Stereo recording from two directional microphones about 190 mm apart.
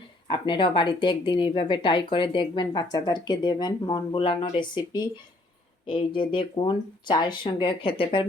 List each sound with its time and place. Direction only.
0.3 s speech: 25° left (ahead or behind)